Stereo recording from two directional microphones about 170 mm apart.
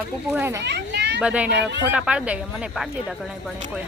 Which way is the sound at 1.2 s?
5° right (ahead or behind).